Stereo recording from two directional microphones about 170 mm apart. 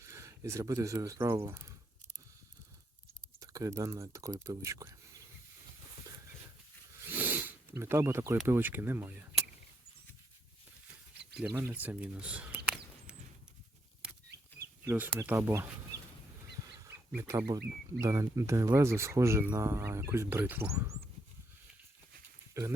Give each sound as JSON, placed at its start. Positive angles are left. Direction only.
{"t": 0.0, "sound": "speech", "side_deg": -15}
{"t": 3.4, "sound": "speech", "side_deg": -20}
{"t": 7.1, "sound": "sniff", "side_deg": -10}
{"t": 8.4, "sound": "speech", "side_deg": -10}
{"t": 11.5, "sound": "speech", "side_deg": -15}
{"t": 14.8, "sound": "speech", "side_deg": -10}
{"t": 17.2, "sound": "speech", "side_deg": -15}
{"t": 22.5, "sound": "speech", "side_deg": -20}